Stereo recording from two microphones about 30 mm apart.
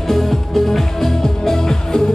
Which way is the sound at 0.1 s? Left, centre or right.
Centre.